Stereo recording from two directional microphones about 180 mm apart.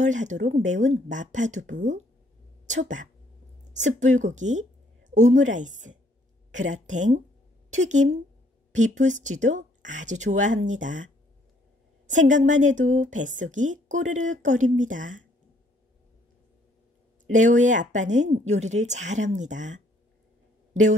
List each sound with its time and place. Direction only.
0.0 s speech: 40° right (ahead or behind)
12.1 s speech: 45° right (ahead or behind)
17.3 s speech: 45° right (ahead or behind)